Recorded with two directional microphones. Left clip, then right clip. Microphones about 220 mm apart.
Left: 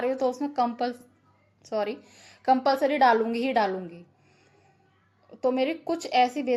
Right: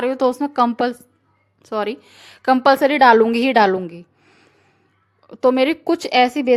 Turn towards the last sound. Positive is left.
turn(degrees=-40)  # may be behind; listen again after turning